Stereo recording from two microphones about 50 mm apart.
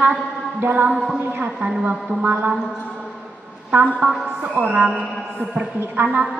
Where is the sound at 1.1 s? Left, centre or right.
Right.